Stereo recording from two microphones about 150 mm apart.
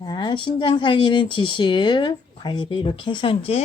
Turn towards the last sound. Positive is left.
turn(degrees=40)  # may be behind; listen again after turning